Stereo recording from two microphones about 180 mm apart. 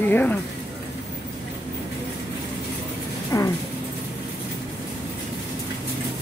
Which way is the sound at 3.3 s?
20° left (ahead or behind).